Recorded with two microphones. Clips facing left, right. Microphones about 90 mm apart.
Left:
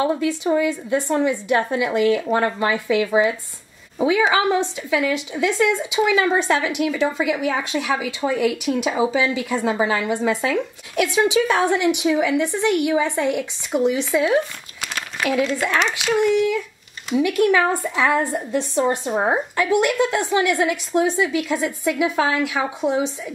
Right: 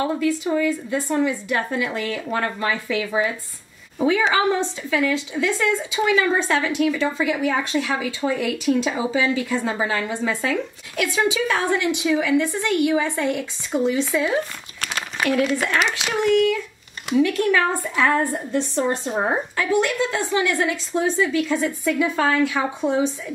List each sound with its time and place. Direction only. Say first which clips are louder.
0.0 s speech: left 1 dB; 15° left (ahead or behind)
15.4 s speech: even; 10° right (ahead or behind)
17.1 s speech: left 1 dB; 10° left (ahead or behind)